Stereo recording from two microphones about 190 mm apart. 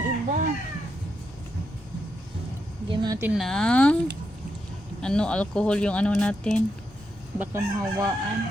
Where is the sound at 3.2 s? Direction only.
5° right (ahead or behind).